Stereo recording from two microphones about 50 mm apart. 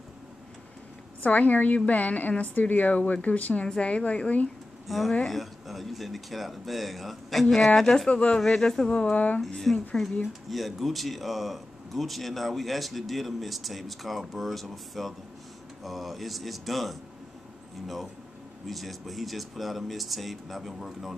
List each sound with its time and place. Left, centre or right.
1.2 s a woman's voice: left
3.6 s a woman's voice: centre
4.8 s speech: centre
8.1 s a woman's voice: left
8.4 s speech: centre
9.0 s a woman's voice: left
9.7 s speech: centre
18.7 s speech: centre